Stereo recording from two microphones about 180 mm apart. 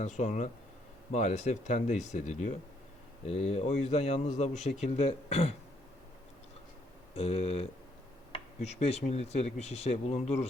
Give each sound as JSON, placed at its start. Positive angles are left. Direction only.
{"t": 0.0, "sound": "speech", "side_deg": 40}
{"t": 7.2, "sound": "speech", "side_deg": 35}